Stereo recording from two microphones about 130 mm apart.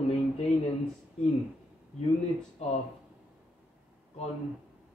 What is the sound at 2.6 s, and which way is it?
Speech, 55° left (ahead or behind).